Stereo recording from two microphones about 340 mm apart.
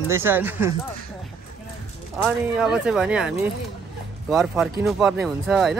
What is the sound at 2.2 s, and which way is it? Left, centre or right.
Speech, centre.